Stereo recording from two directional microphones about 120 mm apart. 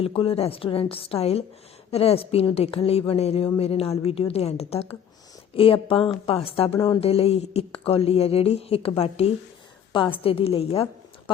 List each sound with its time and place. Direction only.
0.0 s a woman's voice: 50° left (ahead or behind)